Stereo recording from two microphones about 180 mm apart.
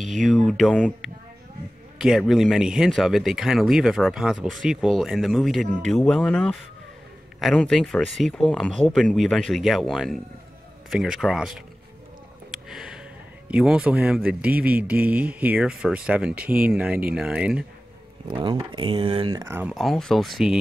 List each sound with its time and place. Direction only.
0.0 s speech: centre (ahead or behind)
12.6 s a sound: 5° right (ahead or behind)
13.5 s speech: 5° right (ahead or behind)
18.4 s speech: 25° right (ahead or behind)
19.4 s speech: 10° right (ahead or behind)
19.7 s speech: centre (ahead or behind)